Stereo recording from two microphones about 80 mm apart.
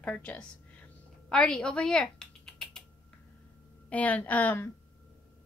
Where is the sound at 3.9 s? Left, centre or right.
Centre.